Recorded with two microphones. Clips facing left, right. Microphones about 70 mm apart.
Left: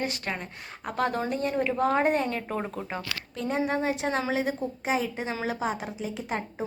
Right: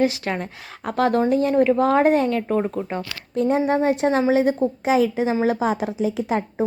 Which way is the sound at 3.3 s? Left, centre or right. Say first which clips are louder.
Right 9 dB; right.